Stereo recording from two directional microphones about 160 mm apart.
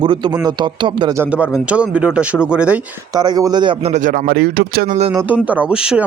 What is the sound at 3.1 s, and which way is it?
Speech, 25° right (ahead or behind).